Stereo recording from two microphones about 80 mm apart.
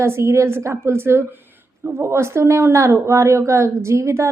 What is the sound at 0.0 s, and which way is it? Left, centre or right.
A woman's voice, right.